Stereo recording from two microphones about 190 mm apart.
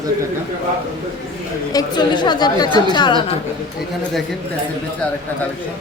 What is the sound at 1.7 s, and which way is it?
A woman's voice, 20° left (ahead or behind).